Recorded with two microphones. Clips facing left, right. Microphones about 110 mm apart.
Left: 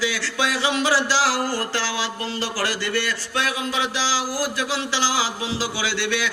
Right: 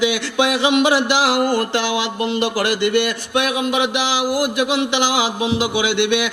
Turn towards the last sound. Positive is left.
turn(degrees=-20)  # may be behind; listen again after turning